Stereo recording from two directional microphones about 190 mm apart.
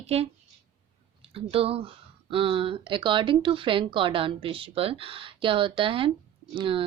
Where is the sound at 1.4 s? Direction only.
30° right (ahead or behind).